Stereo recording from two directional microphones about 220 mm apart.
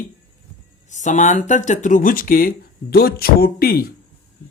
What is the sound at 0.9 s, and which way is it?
Speech, 35° left (ahead or behind).